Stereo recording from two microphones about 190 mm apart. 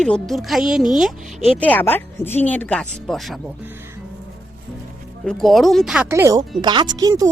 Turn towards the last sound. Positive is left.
turn(degrees=-20)  # may be behind; listen again after turning